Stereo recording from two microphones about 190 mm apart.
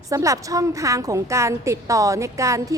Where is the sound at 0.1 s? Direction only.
15° right (ahead or behind).